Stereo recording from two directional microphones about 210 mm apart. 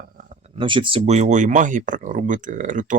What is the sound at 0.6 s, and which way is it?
Speech, 25° right (ahead or behind).